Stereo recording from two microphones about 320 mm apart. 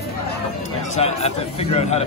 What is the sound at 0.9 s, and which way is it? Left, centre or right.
Speech, centre.